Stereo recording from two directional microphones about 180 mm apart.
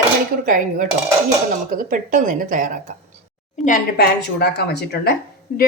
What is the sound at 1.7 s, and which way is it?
Speech, 45° right (ahead or behind).